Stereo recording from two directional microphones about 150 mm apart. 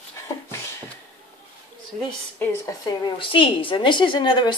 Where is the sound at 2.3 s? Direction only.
20° left (ahead or behind).